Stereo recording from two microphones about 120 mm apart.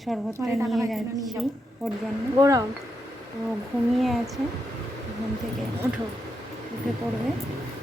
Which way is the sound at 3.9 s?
Centre (ahead or behind).